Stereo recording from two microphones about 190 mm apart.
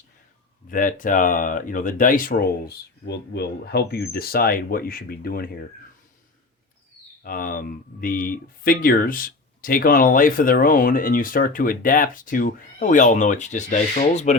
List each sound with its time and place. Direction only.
0.7 s speech: 45° left (ahead or behind)
7.2 s speech: 50° left (ahead or behind)